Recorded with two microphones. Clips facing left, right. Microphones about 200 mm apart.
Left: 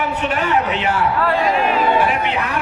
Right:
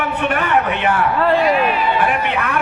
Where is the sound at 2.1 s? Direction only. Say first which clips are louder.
Right 1 dB; 55° right (ahead or behind).